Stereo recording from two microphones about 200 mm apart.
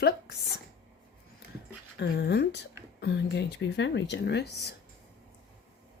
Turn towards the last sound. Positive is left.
turn(degrees=55)  # may be behind; listen again after turning